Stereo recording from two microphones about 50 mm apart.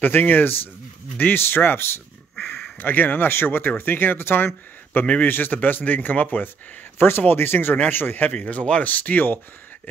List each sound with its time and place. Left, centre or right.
0.0 s speech: left
8.3 s speech: left